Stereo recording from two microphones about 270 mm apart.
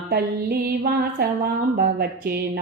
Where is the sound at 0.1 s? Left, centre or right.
Right.